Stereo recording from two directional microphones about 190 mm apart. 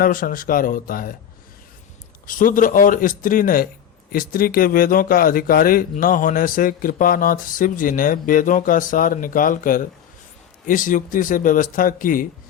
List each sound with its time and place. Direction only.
0.0 s speech: 45° left (ahead or behind)
2.2 s speech: 45° left (ahead or behind)